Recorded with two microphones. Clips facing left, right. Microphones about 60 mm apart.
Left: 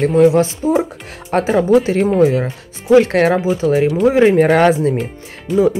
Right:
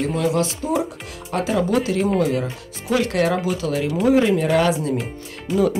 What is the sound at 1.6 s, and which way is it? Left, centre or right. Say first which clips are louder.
Speech: left 7 dB; left.